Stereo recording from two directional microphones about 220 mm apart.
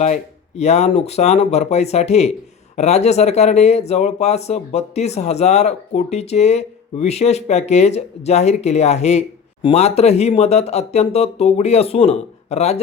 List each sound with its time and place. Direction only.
0.0 s speech: 30° left (ahead or behind)